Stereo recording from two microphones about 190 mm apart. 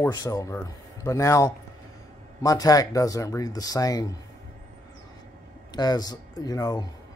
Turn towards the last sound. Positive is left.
turn(degrees=20)  # may be behind; listen again after turning